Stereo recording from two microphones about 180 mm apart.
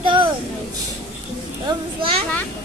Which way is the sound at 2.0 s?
30° right (ahead or behind).